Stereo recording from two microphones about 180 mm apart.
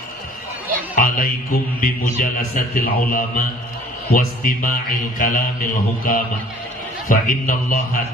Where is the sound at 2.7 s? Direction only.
50° left (ahead or behind).